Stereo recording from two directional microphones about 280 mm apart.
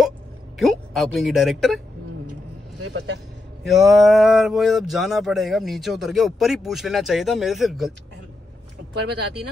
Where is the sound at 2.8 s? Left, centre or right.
Right.